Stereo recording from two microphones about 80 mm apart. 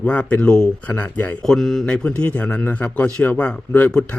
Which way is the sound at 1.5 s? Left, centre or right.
Centre.